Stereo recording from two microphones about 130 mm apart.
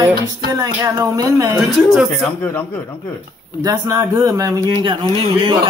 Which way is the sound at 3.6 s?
30° right (ahead or behind).